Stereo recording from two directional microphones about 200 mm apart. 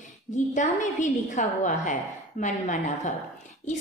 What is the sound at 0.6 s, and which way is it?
A woman's voice, 40° left (ahead or behind).